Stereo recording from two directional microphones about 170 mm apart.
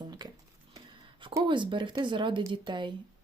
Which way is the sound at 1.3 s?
25° right (ahead or behind).